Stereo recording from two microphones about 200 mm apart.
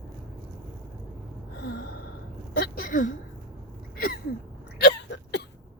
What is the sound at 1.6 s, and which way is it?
Gasp, 50° left (ahead or behind).